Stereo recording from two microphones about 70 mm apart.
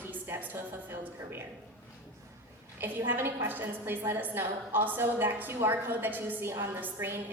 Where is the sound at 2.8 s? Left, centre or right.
Right.